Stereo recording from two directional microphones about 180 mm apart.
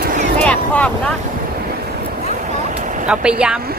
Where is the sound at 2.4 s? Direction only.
45° right (ahead or behind).